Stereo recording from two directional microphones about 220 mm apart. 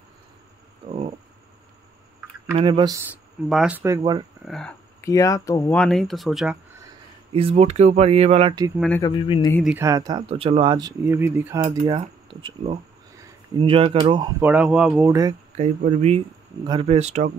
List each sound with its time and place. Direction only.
0.8 s a sound: 30° right (ahead or behind)
2.5 s speech: 20° right (ahead or behind)
3.4 s speech: 5° right (ahead or behind); by 4.3 s 20° right (ahead or behind)
4.5 s speech: centre (ahead or behind)
5.0 s speech: 15° left (ahead or behind); by 6.6 s 5° right (ahead or behind)
7.3 s speech: 30° right (ahead or behind)
8.7 s speech: 5° left (ahead or behind)
9.0 s speech: 20° left (ahead or behind)
9.6 s speech: 5° right (ahead or behind)
9.8 s speech: 15° right (ahead or behind)
11.6 s speech: 25° right (ahead or behind)
14.4 s speech: 5° right (ahead or behind)
15.8 s speech: 30° right (ahead or behind)